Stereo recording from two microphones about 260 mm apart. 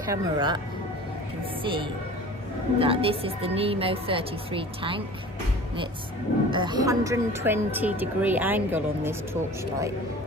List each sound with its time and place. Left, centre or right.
0.1 s speech: centre
1.6 s a woman's voice: centre
6.5 s speech: centre